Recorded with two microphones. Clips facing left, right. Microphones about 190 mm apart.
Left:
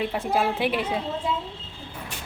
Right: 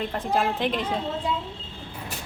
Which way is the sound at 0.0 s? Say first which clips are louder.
Left 1 dB; 10° left (ahead or behind).